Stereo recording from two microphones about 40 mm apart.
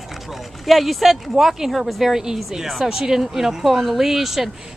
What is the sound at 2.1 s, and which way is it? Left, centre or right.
Speech, centre.